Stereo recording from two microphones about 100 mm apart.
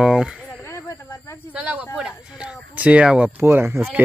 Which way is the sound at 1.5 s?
10° right (ahead or behind).